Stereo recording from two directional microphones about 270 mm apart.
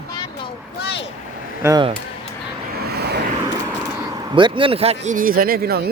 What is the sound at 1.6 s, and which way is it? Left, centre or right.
Speech, centre.